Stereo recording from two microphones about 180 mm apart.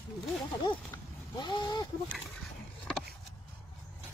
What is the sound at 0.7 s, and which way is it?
Speech, 25° left (ahead or behind).